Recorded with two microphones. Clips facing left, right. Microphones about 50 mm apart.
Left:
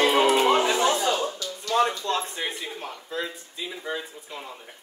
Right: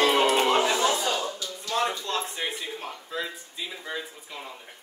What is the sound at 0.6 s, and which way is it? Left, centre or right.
Speech, centre.